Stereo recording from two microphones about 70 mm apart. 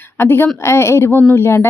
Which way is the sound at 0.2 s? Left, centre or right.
Left.